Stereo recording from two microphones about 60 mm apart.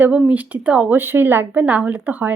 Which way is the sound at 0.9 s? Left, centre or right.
Right.